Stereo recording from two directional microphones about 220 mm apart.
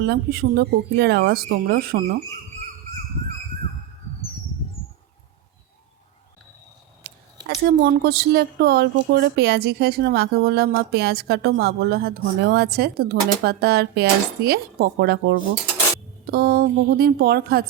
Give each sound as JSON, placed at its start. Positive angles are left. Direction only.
{"t": 0.0, "sound": "speech", "side_deg": -45}
{"t": 7.1, "sound": "a sound", "side_deg": -45}
{"t": 7.4, "sound": "speech", "side_deg": -50}